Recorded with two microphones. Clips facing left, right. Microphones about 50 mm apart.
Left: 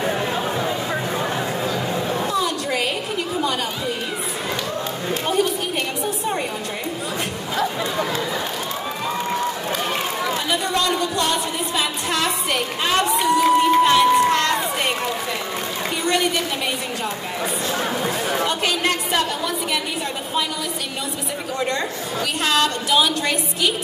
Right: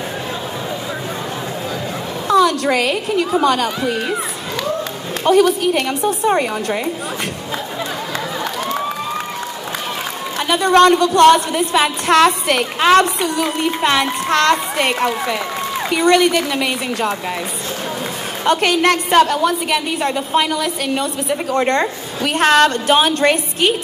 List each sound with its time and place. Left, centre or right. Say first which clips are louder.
2.2 s a woman's voice: right 8 dB; right
5.2 s a woman's voice: right 10 dB; right
10.5 s speech: right 13 dB; right
18.4 s a woman's voice: right 11 dB; right
21.3 s a woman's voice: right 8 dB; right